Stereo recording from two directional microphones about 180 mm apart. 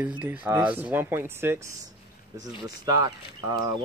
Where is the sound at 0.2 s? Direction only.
10° right (ahead or behind).